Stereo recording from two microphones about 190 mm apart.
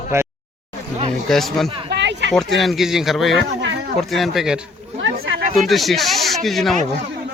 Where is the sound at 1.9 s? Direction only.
65° right (ahead or behind).